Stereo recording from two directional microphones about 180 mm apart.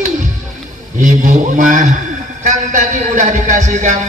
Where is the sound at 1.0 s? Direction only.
45° right (ahead or behind).